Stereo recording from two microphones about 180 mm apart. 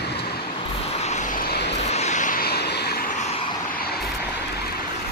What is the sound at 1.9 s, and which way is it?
Vehicle, 40° left (ahead or behind).